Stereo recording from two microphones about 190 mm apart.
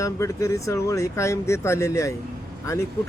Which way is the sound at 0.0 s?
15° left (ahead or behind).